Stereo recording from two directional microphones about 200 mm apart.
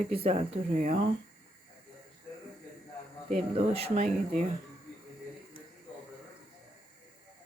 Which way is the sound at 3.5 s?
30° right (ahead or behind).